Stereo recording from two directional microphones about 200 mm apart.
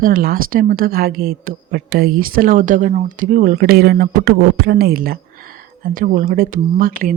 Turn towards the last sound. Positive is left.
turn(degrees=-45)  # may be behind; listen again after turning